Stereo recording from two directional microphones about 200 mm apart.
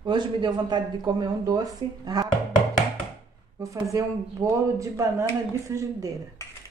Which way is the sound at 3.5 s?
15° right (ahead or behind).